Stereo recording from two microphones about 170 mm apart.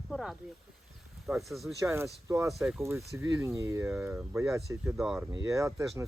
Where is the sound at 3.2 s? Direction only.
15° right (ahead or behind).